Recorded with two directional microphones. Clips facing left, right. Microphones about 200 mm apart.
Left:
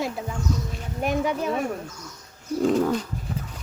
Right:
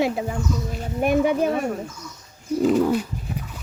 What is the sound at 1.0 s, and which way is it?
Speech, 55° right (ahead or behind).